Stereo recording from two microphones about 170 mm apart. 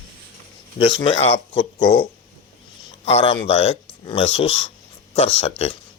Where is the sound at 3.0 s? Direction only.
35° left (ahead or behind).